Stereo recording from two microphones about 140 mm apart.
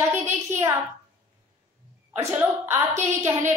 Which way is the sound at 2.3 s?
15° right (ahead or behind).